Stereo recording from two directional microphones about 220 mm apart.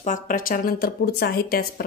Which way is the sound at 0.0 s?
35° left (ahead or behind).